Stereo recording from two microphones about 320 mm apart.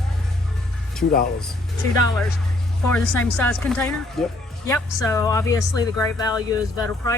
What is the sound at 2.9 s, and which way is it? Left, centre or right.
Speech, centre.